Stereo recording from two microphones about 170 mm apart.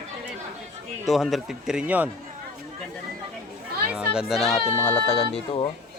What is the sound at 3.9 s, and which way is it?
Speech, 5° right (ahead or behind).